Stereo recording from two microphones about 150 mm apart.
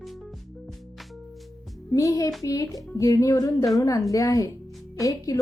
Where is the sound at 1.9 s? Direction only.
25° left (ahead or behind).